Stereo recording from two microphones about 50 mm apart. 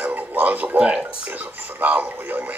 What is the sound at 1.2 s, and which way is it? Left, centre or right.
Speech, right.